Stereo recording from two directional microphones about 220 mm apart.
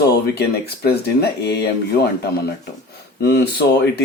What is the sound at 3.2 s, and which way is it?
Speech, 50° left (ahead or behind).